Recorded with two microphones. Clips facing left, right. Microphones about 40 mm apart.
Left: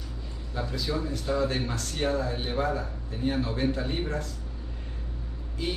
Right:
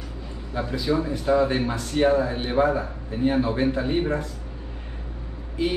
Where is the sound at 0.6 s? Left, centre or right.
Right.